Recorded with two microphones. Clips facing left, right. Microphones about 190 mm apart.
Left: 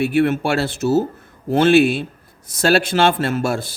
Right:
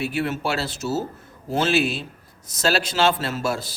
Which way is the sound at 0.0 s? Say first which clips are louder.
Left 8 dB; 55° left (ahead or behind).